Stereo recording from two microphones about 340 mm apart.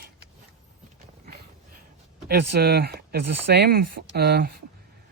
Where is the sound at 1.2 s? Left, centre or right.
Right.